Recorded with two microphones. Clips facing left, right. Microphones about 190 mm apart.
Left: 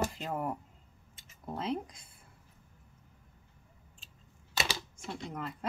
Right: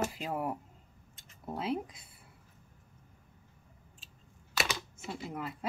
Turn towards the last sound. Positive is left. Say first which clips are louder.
# even
turn(degrees=-5)  # may be behind; listen again after turning